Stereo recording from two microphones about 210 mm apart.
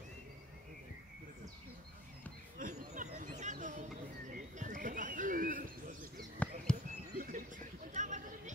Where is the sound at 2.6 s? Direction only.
35° right (ahead or behind).